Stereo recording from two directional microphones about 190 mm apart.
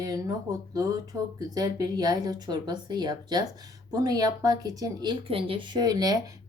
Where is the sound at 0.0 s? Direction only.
20° right (ahead or behind).